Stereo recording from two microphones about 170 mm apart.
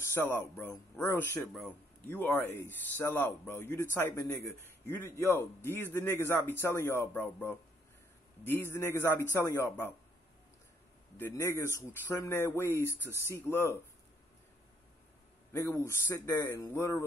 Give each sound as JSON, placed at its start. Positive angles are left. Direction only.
{"t": 0.0, "sound": "a man's voice", "side_deg": 15}
{"t": 11.1, "sound": "a man's voice", "side_deg": 15}
{"t": 15.5, "sound": "a man's voice", "side_deg": 15}